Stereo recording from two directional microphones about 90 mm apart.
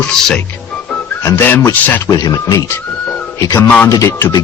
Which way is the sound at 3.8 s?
40° left (ahead or behind).